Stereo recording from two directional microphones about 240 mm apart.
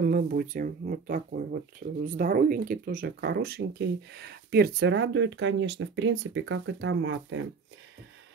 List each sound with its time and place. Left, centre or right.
0.0 s speech: right